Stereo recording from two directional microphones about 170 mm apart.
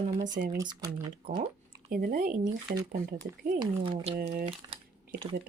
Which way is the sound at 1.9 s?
55° right (ahead or behind).